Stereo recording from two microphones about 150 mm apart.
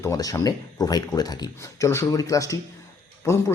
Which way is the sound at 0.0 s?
25° left (ahead or behind).